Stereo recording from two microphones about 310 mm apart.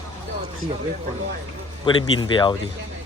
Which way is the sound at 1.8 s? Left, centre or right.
Centre.